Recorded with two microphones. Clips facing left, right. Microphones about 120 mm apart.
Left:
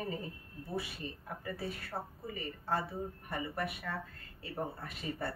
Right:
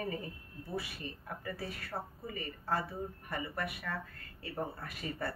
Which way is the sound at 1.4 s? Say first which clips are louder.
Left 2 dB; 25° left (ahead or behind).